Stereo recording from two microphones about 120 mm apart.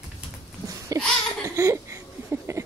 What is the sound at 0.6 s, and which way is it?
Babbling, 25° right (ahead or behind).